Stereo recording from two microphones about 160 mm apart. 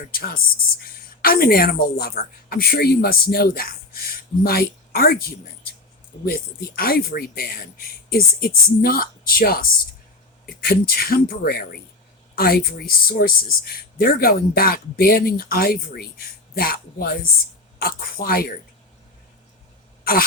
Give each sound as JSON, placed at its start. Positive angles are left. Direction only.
{"t": 0.0, "sound": "speech", "side_deg": 65}
{"t": 6.2, "sound": "speech", "side_deg": 65}
{"t": 20.1, "sound": "speech", "side_deg": 65}